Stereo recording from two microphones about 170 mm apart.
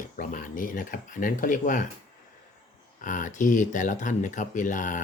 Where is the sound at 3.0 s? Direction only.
50° left (ahead or behind).